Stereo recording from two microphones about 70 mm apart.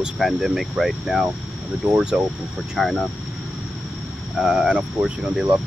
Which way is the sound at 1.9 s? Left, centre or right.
Centre.